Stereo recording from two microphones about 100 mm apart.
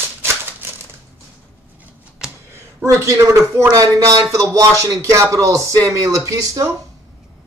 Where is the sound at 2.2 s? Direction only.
5° right (ahead or behind).